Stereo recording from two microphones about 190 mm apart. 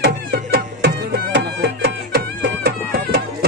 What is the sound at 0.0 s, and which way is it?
Music, 60° right (ahead or behind).